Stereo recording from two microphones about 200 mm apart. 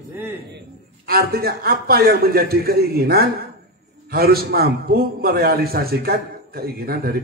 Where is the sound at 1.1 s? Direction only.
50° right (ahead or behind).